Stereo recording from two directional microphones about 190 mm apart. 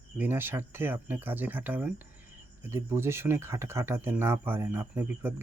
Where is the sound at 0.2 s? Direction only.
10° right (ahead or behind).